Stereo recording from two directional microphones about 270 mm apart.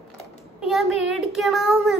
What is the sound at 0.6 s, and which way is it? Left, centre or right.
A child's voice, centre.